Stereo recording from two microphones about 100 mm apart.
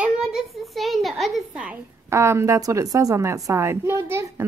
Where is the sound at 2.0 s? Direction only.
25° right (ahead or behind).